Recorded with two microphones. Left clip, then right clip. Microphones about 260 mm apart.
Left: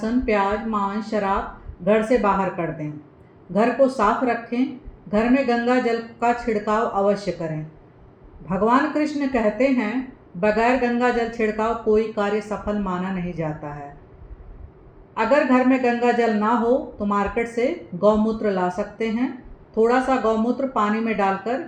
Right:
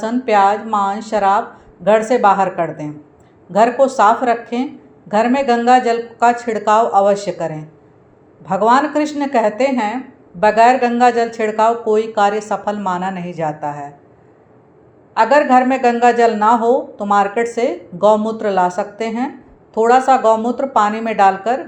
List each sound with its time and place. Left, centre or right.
0.0 s speech: centre
15.1 s speech: centre